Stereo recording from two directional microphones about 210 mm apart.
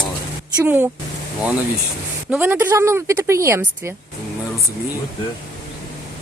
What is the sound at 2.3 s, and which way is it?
Speech, 10° right (ahead or behind).